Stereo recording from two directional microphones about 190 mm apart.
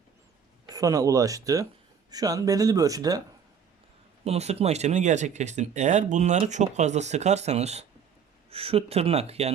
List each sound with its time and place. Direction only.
0.7 s speech: 20° right (ahead or behind)
4.2 s speech: 35° right (ahead or behind)